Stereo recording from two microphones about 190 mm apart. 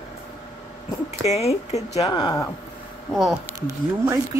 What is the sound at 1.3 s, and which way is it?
Speech, 35° left (ahead or behind).